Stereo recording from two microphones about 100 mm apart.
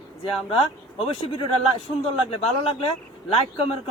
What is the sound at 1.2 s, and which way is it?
A man's voice, 65° left (ahead or behind).